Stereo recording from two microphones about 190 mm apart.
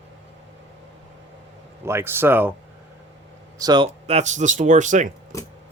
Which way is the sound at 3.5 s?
20° right (ahead or behind).